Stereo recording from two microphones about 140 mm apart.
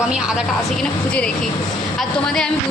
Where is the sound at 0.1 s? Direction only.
5° right (ahead or behind).